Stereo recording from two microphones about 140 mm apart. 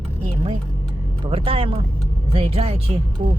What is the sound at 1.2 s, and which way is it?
Speech, 40° right (ahead or behind).